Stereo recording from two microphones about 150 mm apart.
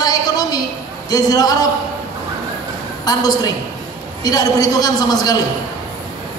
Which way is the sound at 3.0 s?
25° left (ahead or behind).